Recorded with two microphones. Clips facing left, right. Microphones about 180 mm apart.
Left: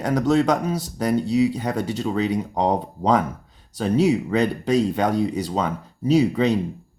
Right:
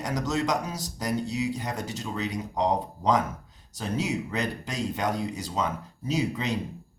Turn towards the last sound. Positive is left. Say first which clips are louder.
# left 10 dB
turn(degrees=65)  # may be behind; listen again after turning